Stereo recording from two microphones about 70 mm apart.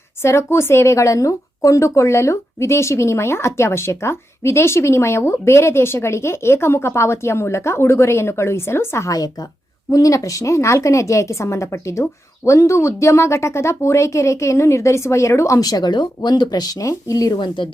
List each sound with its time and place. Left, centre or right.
0.2 s speech: left
9.0 s a woman's voice: left